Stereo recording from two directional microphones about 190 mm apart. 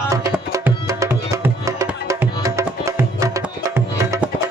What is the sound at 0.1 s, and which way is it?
Music, 15° right (ahead or behind).